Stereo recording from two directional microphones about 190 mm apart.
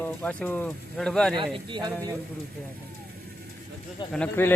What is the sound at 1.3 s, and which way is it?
Speech, 25° right (ahead or behind).